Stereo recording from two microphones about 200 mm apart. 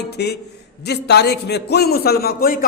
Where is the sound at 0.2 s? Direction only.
55° left (ahead or behind).